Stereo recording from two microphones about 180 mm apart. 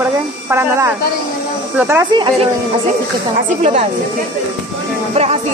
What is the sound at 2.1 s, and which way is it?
Speech, 25° right (ahead or behind).